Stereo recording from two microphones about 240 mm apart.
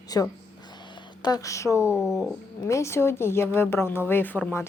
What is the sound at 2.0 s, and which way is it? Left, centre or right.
Speech, centre.